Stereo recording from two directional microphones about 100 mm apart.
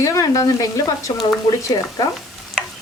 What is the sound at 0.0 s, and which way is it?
Speech, 35° left (ahead or behind).